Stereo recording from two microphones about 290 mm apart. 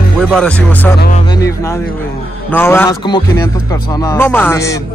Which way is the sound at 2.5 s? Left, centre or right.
Centre.